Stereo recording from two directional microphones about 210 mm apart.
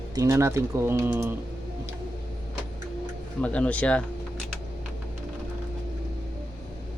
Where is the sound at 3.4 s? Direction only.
5° left (ahead or behind).